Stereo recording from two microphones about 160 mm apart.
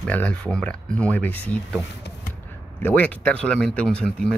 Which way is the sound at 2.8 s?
10° left (ahead or behind).